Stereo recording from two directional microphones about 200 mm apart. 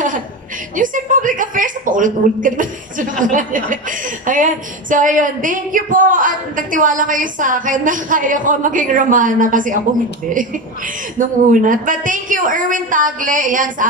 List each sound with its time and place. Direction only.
0.7 s speech: 40° right (ahead or behind)
11.1 s speech: 40° right (ahead or behind)